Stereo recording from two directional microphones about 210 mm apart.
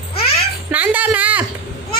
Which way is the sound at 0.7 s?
10° right (ahead or behind).